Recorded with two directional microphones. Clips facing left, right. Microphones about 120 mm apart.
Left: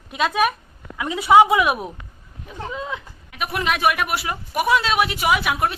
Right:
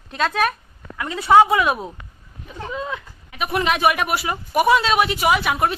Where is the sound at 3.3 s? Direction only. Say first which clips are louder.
Right 3 dB; centre (ahead or behind).